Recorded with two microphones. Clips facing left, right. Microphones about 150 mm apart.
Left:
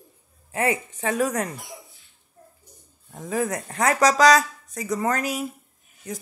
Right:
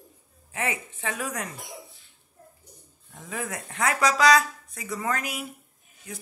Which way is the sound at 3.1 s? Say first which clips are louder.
Left 8 dB; 40° left (ahead or behind).